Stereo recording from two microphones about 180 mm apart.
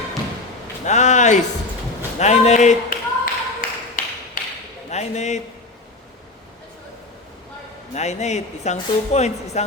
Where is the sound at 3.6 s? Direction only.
50° left (ahead or behind).